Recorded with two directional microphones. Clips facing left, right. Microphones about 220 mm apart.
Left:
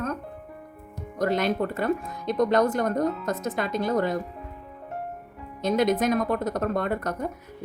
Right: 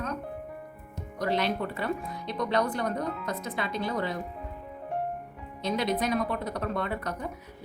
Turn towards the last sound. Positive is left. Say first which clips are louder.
# left 5 dB
turn(degrees=45)  # may be behind; listen again after turning